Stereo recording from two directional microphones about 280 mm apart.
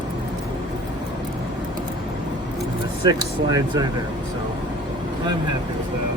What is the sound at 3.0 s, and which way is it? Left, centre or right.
Speech, centre.